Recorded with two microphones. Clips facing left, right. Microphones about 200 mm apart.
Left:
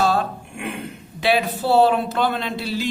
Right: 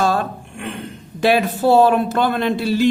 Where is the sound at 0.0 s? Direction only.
50° right (ahead or behind).